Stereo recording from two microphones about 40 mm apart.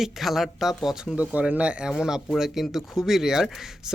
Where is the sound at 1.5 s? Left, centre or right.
Right.